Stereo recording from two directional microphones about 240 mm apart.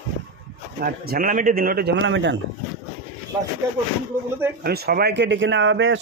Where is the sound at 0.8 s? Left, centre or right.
Right.